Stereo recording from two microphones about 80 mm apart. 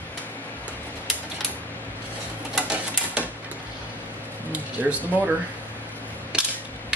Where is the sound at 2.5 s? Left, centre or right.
Centre.